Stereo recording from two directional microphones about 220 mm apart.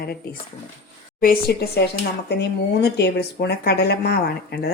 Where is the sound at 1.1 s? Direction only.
45° left (ahead or behind).